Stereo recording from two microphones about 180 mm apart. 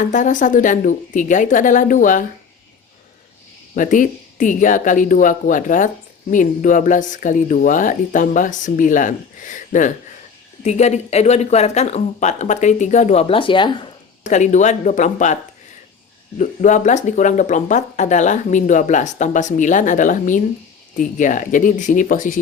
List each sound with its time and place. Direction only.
0.0 s speech: 45° left (ahead or behind)
3.8 s speech: 45° left (ahead or behind); by 13.7 s 25° left (ahead or behind)
14.3 s speech: 40° left (ahead or behind)
16.4 s speech: 45° left (ahead or behind)